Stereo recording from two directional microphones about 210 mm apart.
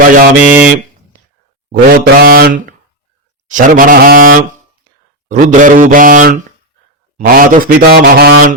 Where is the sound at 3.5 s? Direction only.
40° right (ahead or behind).